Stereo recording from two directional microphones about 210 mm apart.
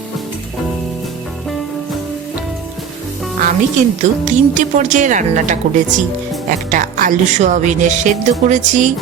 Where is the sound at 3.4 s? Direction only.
35° right (ahead or behind).